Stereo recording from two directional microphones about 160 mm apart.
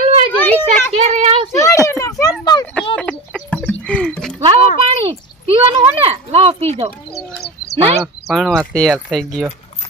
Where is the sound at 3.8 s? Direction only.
5° left (ahead or behind).